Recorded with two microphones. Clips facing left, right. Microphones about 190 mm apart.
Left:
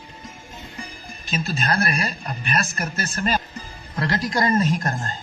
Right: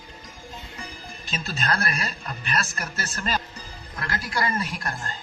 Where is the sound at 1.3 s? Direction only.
15° left (ahead or behind).